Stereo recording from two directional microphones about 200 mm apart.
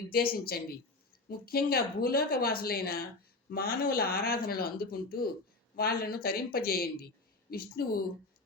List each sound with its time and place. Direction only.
0.4 s speech: 50° left (ahead or behind)